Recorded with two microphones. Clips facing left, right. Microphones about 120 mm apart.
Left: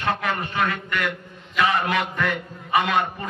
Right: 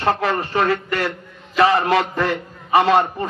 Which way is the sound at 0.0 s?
35° right (ahead or behind).